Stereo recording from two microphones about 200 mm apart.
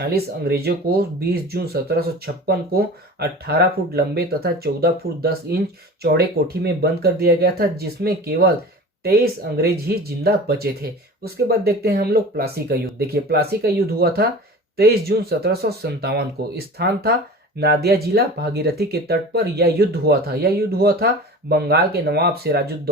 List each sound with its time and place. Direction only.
0.0 s speech: 50° right (ahead or behind)